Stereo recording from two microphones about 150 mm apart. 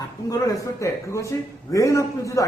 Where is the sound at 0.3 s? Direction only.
20° left (ahead or behind).